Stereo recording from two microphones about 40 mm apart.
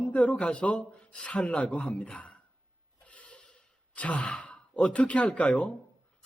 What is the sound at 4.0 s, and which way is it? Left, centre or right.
Sigh, left.